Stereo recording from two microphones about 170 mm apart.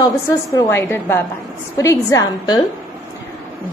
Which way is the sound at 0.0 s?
20° left (ahead or behind).